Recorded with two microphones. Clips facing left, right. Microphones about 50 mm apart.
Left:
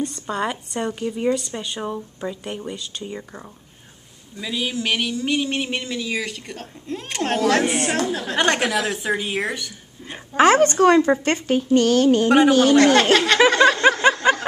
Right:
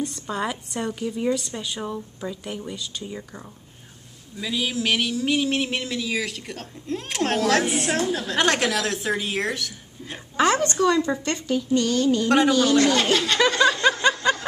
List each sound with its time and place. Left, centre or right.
0.0 s speech: centre
10.3 s a woman's voice: left
13.5 s a sound: left